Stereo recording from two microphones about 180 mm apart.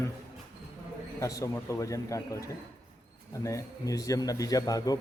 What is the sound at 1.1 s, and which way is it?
A man's voice, 20° left (ahead or behind).